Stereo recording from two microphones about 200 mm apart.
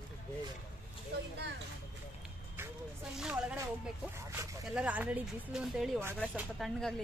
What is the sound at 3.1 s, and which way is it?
Speech, 5° right (ahead or behind).